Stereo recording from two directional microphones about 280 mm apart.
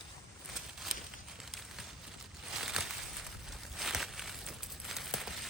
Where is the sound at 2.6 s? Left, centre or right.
Centre.